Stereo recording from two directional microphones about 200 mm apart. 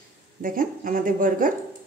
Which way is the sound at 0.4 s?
45° right (ahead or behind).